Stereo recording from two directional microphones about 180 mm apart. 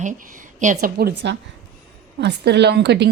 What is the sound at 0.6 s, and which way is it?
Speech, 50° right (ahead or behind).